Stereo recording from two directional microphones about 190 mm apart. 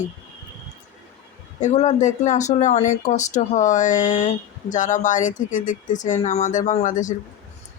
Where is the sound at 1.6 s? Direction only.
35° left (ahead or behind).